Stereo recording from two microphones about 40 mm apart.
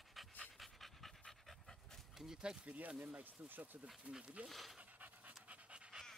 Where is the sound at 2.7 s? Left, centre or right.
Right.